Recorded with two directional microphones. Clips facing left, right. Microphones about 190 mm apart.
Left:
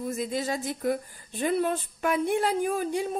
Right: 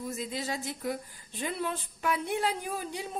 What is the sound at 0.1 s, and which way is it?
A woman's voice, 50° left (ahead or behind).